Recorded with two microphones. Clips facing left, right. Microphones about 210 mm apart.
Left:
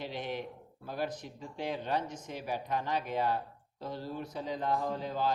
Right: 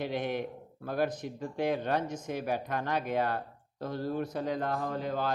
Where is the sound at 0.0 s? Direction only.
55° right (ahead or behind).